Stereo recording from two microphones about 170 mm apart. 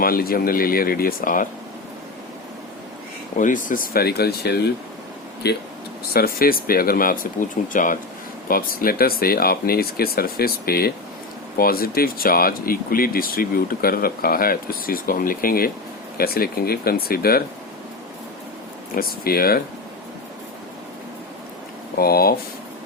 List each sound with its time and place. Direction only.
0.0 s speech: 60° left (ahead or behind)
3.3 s speech: 50° left (ahead or behind); by 5.6 s 70° left (ahead or behind)
6.1 s speech: 60° left (ahead or behind)
18.9 s speech: 60° left (ahead or behind)
21.9 s speech: 60° left (ahead or behind)